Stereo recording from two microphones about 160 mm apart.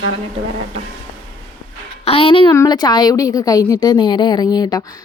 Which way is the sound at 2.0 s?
35° left (ahead or behind).